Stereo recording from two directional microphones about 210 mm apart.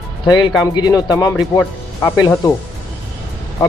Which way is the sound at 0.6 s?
20° left (ahead or behind).